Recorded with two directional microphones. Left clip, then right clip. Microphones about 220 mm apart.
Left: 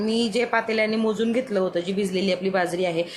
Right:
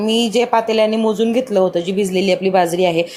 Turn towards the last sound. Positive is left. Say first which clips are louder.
# right 9 dB
turn(degrees=-20)  # may be behind; listen again after turning